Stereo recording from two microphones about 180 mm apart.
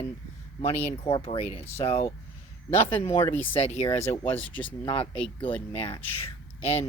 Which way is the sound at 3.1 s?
15° left (ahead or behind).